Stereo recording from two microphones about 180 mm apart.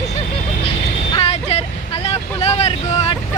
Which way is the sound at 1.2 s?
35° left (ahead or behind).